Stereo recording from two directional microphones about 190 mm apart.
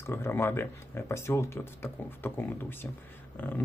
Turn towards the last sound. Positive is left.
turn(degrees=10)  # may be behind; listen again after turning